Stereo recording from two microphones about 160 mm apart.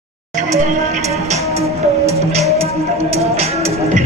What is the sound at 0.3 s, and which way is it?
Music, 50° right (ahead or behind).